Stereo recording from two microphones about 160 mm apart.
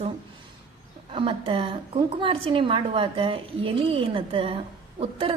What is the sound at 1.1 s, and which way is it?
A woman's voice, 35° right (ahead or behind).